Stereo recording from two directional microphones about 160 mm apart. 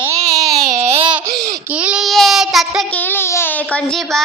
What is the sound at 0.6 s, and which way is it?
Baby cry, 50° right (ahead or behind).